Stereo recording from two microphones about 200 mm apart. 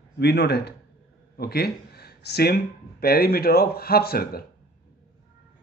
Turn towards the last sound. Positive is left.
turn(degrees=50)  # may be behind; listen again after turning